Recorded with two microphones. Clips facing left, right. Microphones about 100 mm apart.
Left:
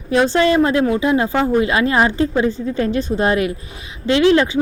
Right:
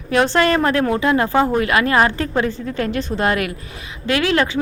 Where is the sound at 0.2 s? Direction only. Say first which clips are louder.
Left 1 dB; 55° right (ahead or behind).